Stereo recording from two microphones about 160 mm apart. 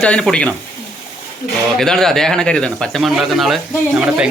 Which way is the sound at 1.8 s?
5° left (ahead or behind).